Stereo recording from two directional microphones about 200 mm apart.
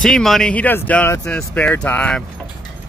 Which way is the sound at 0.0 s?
Centre (ahead or behind).